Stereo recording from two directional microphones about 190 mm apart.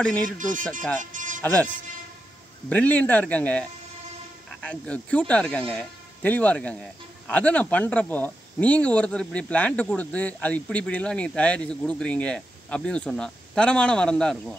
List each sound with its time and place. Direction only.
0.4 s speech: 45° right (ahead or behind)
1.1 s music: 45° right (ahead or behind)
1.4 s speech: 10° left (ahead or behind)
2.7 s speech: 10° left (ahead or behind)
4.6 s speech: 5° left (ahead or behind)